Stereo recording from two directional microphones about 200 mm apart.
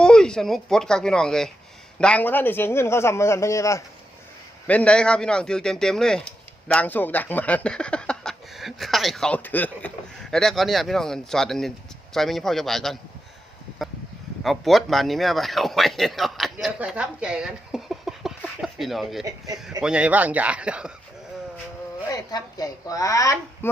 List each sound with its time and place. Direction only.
0.0 s a man's voice: 5° left (ahead or behind)
14.4 s speech: centre (ahead or behind)
22.1 s a man's voice: 20° left (ahead or behind)